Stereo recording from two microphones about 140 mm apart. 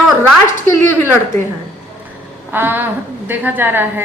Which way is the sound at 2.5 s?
15° right (ahead or behind).